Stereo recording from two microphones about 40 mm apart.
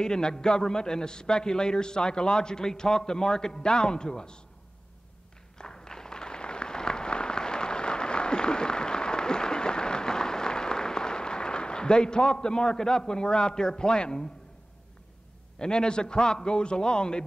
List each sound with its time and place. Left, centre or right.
0.0 s a man's voice: centre
5.6 s a sound: centre
15.6 s a man's voice: left